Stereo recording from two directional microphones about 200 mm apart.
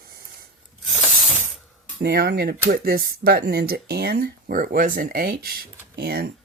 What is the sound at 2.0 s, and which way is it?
Speech, 50° right (ahead or behind).